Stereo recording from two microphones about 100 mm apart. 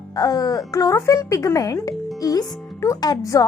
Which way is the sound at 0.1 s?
40° left (ahead or behind).